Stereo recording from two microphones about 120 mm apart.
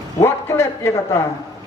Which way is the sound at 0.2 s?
20° left (ahead or behind).